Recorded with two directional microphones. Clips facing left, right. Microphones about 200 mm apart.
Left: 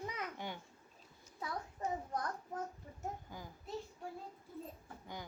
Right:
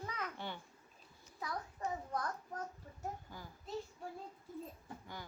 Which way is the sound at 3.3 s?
15° left (ahead or behind).